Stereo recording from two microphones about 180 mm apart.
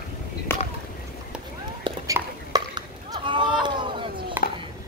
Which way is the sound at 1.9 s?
25° right (ahead or behind).